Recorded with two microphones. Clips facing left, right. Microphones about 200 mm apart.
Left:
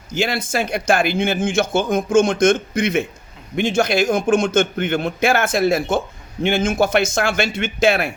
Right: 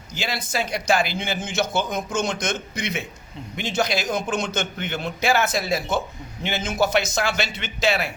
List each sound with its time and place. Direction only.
0.1 s speech: 50° left (ahead or behind)